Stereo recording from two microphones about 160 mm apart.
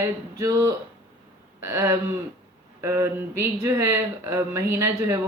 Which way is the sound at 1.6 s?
20° right (ahead or behind).